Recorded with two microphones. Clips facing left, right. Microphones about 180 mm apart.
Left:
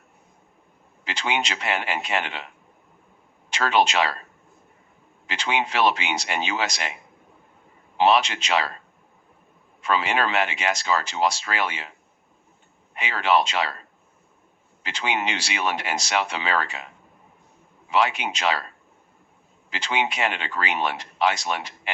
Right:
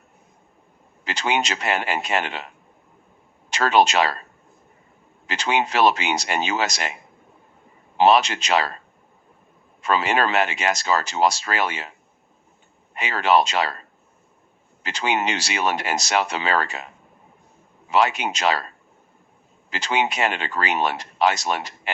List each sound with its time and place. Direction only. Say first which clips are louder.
1.0 s speech: right 3 dB; 40° right (ahead or behind)
3.5 s speech: right 3 dB; 40° right (ahead or behind)
5.2 s speech: right 3 dB; 40° right (ahead or behind)
7.9 s speech: right 3 dB; 40° right (ahead or behind)
9.8 s speech: right 3 dB; 40° right (ahead or behind)
12.9 s speech: right 3 dB; 40° right (ahead or behind)
14.8 s speech: right 3 dB; 40° right (ahead or behind)
17.9 s speech: right 2 dB; 40° right (ahead or behind)
19.7 s speech: right 3 dB; 40° right (ahead or behind)